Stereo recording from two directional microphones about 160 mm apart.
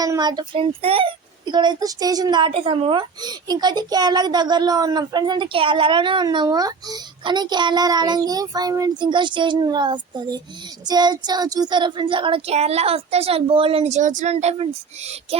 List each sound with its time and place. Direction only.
0.0 s a woman's voice: 25° right (ahead or behind)